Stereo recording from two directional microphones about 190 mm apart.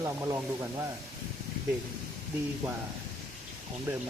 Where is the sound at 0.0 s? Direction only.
15° right (ahead or behind).